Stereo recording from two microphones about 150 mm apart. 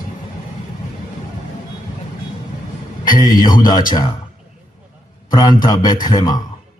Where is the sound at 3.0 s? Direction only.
25° left (ahead or behind).